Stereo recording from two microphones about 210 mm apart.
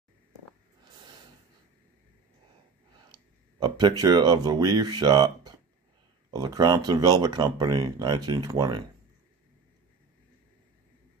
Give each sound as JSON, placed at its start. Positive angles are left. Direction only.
{"t": 3.1, "sound": "speech", "side_deg": -20}